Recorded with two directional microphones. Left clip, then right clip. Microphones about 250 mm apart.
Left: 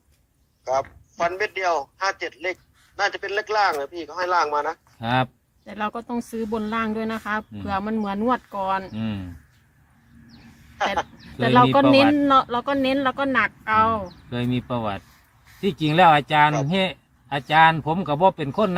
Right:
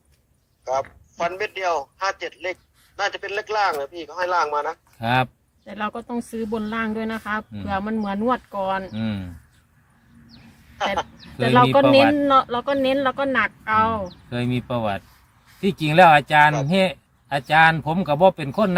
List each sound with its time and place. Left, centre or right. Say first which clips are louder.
0.6 s a man's voice: left 1 dB; centre
4.9 s speech: right 2 dB; right
5.6 s speech: even; centre
9.0 s speech: right 2 dB; right
10.8 s speech: even; centre
14.1 s speech: right 1 dB; right